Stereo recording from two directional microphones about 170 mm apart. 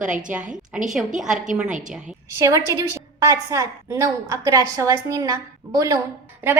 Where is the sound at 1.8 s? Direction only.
5° right (ahead or behind).